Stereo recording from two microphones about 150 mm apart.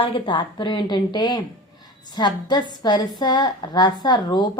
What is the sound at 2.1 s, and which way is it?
A woman's voice, 30° left (ahead or behind).